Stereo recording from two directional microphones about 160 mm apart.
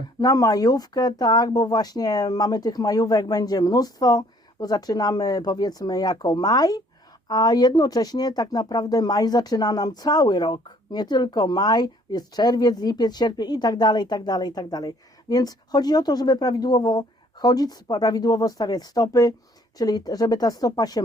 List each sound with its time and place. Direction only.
0.2 s speech: 20° left (ahead or behind)